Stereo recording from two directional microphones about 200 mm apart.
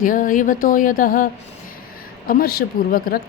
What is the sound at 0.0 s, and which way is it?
Speech, 40° left (ahead or behind).